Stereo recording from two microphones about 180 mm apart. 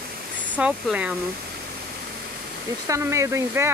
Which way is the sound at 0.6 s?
5° right (ahead or behind).